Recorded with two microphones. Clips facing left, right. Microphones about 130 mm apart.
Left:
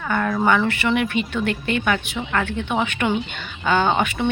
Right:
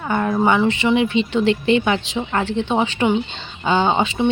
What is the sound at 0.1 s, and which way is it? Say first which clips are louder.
Speech: right 2 dB; 25° right (ahead or behind).